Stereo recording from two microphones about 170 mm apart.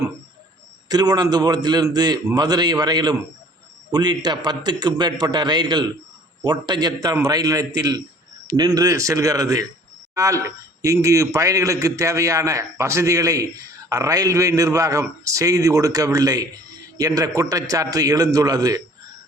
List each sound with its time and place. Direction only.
0.9 s a man's voice: 25° right (ahead or behind)